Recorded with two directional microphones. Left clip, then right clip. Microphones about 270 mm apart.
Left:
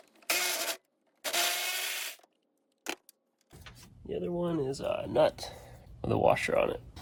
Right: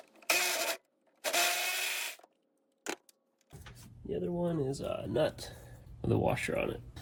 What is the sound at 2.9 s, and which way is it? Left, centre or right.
Keys jangling, centre.